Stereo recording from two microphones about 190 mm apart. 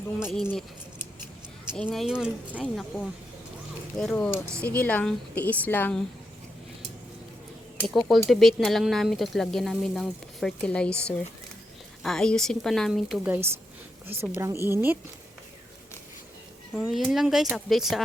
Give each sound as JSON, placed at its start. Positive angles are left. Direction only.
{"t": 1.7, "sound": "a woman's voice", "side_deg": 5}
{"t": 7.8, "sound": "a woman's voice", "side_deg": 0}
{"t": 16.7, "sound": "speech", "side_deg": 0}